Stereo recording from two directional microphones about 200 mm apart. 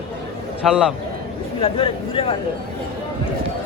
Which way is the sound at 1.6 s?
25° left (ahead or behind).